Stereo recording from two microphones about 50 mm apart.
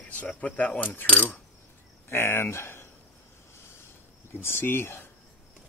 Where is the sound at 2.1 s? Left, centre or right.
Left.